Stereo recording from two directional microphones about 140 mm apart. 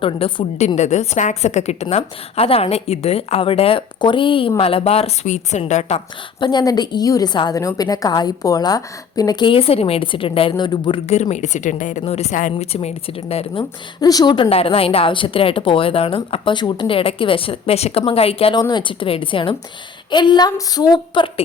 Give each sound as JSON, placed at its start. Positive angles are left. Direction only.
{"t": 0.0, "sound": "a woman's voice", "side_deg": 35}
{"t": 0.8, "sound": "a woman's voice", "side_deg": 55}
{"t": 6.4, "sound": "a woman's voice", "side_deg": 30}
{"t": 11.1, "sound": "a woman's voice", "side_deg": 55}
{"t": 12.0, "sound": "a woman's voice", "side_deg": 50}
{"t": 14.5, "sound": "a woman's voice", "side_deg": 45}